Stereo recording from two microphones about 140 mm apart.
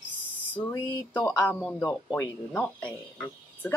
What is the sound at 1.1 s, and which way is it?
Speech, 10° left (ahead or behind).